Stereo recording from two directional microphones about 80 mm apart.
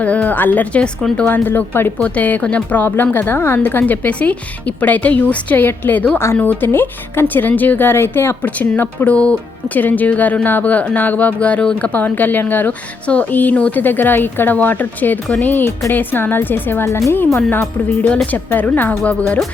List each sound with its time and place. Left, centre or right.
0.0 s speech: centre
16.8 s speech: left; by 19.4 s centre